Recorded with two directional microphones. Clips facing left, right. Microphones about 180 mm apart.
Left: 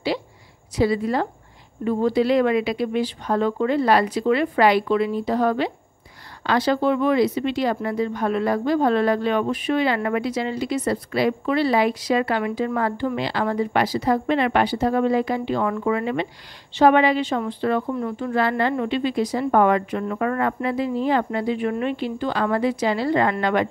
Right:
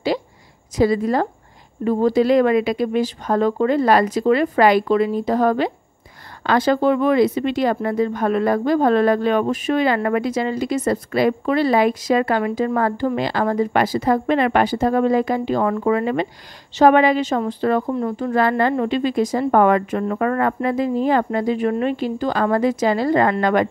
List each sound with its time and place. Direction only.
0.7 s speech: 45° right (ahead or behind)